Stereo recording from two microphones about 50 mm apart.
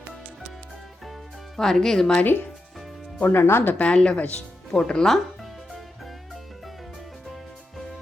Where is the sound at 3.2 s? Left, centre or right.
Left.